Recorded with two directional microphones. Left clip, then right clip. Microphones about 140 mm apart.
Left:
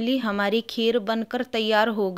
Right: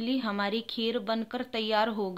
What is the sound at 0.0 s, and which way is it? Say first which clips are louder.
A woman's voice: left 6 dB; 50° left (ahead or behind).